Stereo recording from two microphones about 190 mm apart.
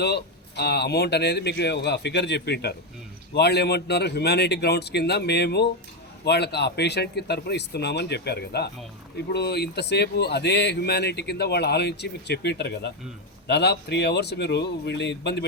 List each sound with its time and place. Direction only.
0.0 s speech: 60° left (ahead or behind)